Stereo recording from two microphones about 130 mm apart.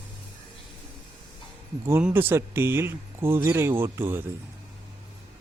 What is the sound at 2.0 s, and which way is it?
Speech, 15° right (ahead or behind).